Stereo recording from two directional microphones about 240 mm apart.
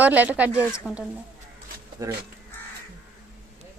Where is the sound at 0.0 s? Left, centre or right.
Centre.